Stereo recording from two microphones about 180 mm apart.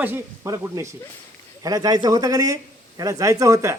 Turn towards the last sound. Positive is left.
turn(degrees=-15)  # may be behind; listen again after turning